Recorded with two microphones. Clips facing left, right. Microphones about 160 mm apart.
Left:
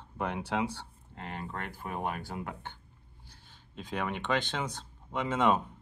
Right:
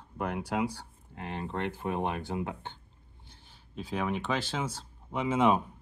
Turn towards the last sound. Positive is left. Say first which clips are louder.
# right 2 dB
turn(degrees=-10)  # may be behind; listen again after turning